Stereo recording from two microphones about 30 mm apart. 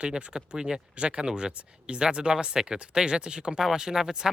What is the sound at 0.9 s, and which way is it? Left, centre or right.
Speech, right.